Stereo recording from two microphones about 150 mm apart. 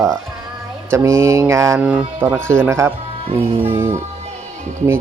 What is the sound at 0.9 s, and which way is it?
Mantra, 20° right (ahead or behind).